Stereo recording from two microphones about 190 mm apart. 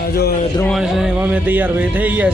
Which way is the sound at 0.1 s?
55° left (ahead or behind).